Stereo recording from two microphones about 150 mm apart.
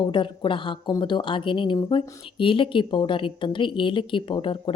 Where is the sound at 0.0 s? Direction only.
35° left (ahead or behind).